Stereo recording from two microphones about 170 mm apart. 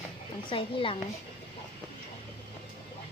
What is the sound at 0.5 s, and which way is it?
Speech, 30° left (ahead or behind).